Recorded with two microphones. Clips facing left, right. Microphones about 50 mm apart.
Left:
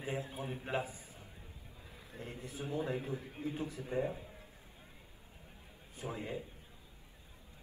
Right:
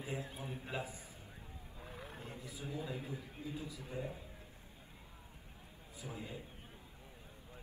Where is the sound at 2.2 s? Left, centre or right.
Left.